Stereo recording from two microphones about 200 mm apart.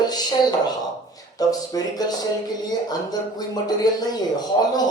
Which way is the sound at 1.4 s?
20° left (ahead or behind).